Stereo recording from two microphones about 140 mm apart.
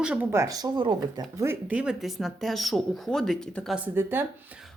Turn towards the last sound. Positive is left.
turn(degrees=-15)  # may be behind; listen again after turning